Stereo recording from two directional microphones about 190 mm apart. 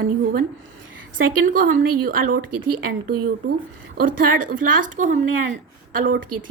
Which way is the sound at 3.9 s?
45° right (ahead or behind).